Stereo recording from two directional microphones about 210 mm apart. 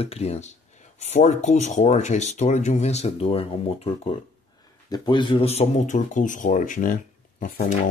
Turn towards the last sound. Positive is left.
turn(degrees=40)  # may be behind; listen again after turning